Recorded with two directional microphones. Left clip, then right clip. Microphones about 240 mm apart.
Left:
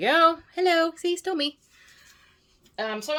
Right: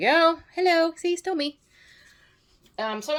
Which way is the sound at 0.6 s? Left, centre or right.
Left.